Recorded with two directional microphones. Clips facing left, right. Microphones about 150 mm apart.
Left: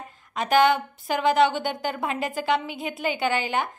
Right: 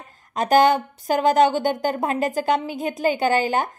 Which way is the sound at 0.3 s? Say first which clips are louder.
Right 3 dB; 40° right (ahead or behind).